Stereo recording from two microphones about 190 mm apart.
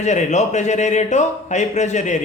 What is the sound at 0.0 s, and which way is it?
Speech, 40° left (ahead or behind).